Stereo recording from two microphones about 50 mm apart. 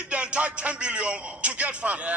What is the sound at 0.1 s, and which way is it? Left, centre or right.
A man's voice, right.